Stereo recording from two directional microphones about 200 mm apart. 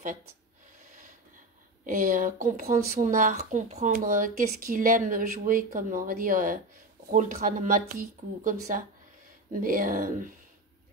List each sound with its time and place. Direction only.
1.9 s speech: 40° right (ahead or behind)